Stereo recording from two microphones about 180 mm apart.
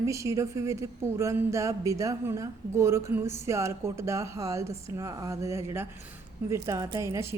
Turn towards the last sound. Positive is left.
turn(degrees=-15)  # may be behind; listen again after turning